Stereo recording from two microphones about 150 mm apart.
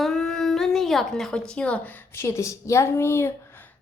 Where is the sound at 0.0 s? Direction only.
Centre (ahead or behind).